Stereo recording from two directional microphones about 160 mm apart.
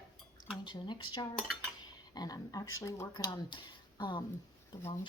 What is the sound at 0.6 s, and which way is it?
Speech, 30° left (ahead or behind).